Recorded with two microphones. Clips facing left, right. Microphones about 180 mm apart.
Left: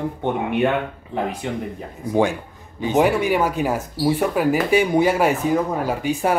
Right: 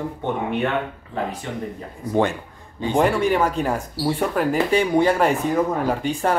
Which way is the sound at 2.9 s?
5° left (ahead or behind).